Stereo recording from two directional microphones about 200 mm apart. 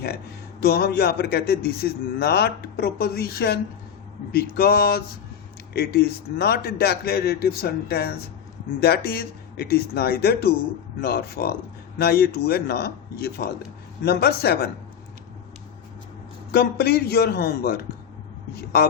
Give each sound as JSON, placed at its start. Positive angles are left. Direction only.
{"t": 0.6, "sound": "a man's voice", "side_deg": 50}
{"t": 16.5, "sound": "a man's voice", "side_deg": 50}